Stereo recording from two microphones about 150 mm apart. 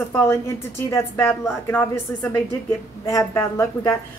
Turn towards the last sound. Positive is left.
turn(degrees=20)  # may be behind; listen again after turning